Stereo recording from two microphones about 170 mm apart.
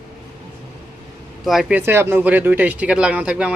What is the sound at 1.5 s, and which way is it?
A woman's voice, 5° right (ahead or behind).